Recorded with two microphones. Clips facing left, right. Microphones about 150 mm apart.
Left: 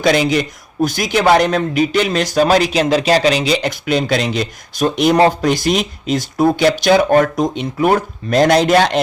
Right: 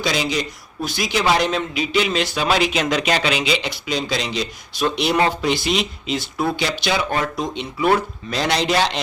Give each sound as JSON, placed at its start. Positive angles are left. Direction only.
{"t": 0.0, "sound": "speech", "side_deg": 55}